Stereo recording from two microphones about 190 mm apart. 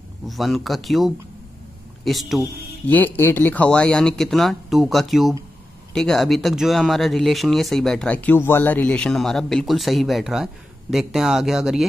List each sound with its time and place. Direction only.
0.3 s speech: centre (ahead or behind)